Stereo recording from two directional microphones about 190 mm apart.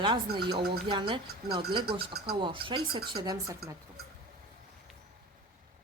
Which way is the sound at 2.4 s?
25° right (ahead or behind).